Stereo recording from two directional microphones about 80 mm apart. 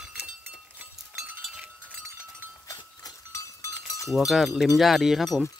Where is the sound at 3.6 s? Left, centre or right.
Left.